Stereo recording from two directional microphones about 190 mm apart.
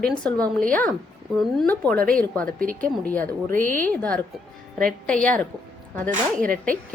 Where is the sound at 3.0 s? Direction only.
5° left (ahead or behind).